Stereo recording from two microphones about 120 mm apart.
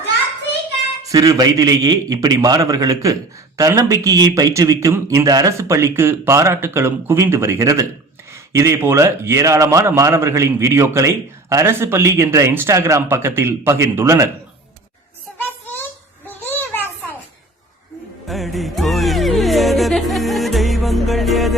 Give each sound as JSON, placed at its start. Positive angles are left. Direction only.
{"t": 1.0, "sound": "a man's voice", "side_deg": -30}
{"t": 15.4, "sound": "a sound", "side_deg": 15}
{"t": 18.3, "sound": "music", "side_deg": 0}